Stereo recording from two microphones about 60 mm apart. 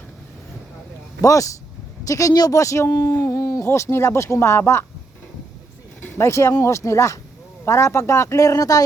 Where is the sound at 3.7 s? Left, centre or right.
Left.